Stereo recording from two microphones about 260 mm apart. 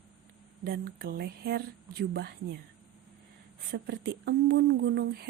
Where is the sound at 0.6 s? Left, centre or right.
Right.